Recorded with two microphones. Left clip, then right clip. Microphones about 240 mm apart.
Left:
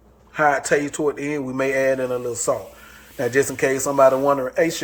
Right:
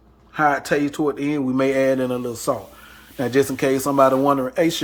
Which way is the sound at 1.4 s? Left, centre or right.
Right.